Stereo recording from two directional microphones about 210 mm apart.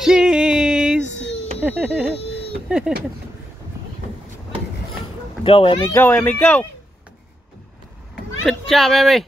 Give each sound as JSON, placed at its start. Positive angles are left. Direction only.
{"t": 0.0, "sound": "music", "side_deg": -5}
{"t": 1.6, "sound": "a sound", "side_deg": -5}
{"t": 2.7, "sound": "speech", "side_deg": -5}
{"t": 5.4, "sound": "speech", "side_deg": 25}
{"t": 5.9, "sound": "speech", "side_deg": 10}
{"t": 8.5, "sound": "speech", "side_deg": 0}